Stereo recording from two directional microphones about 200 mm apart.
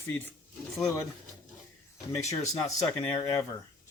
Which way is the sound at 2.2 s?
15° left (ahead or behind).